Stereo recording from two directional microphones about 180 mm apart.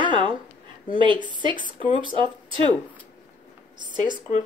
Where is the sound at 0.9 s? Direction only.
25° right (ahead or behind).